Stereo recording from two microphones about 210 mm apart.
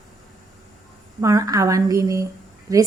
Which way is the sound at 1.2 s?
15° right (ahead or behind).